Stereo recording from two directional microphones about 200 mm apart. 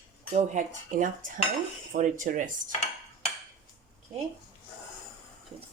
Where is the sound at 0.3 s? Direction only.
40° right (ahead or behind).